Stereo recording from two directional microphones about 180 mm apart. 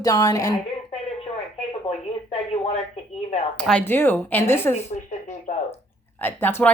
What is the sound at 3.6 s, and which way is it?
A woman's voice, 5° left (ahead or behind).